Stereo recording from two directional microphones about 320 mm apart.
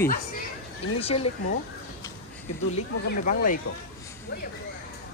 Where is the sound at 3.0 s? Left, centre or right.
Left.